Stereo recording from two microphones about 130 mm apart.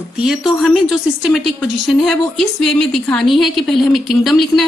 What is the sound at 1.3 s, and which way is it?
Speech, centre (ahead or behind).